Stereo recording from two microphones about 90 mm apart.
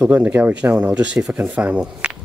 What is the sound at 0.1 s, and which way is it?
Speech, 15° right (ahead or behind).